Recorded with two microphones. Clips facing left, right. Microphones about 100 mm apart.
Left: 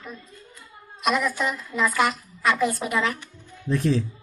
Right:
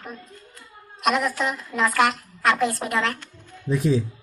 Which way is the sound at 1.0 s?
Centre (ahead or behind).